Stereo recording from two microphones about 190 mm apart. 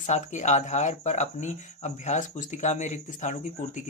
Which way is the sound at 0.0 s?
40° left (ahead or behind).